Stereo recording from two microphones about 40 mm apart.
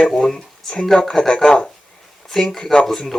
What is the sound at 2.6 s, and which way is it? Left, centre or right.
Speech, centre.